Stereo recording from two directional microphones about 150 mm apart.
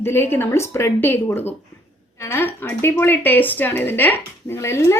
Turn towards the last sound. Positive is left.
turn(degrees=15)  # may be behind; listen again after turning